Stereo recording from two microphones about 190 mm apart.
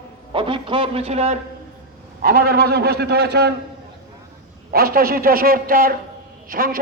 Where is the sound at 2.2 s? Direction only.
50° right (ahead or behind).